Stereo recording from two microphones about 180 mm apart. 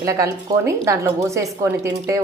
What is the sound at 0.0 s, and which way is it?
A woman's voice, 15° right (ahead or behind).